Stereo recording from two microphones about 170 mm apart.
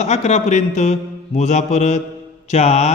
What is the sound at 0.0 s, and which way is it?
Mantra, 40° left (ahead or behind).